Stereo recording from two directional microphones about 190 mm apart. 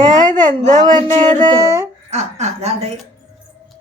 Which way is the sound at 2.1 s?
35° right (ahead or behind).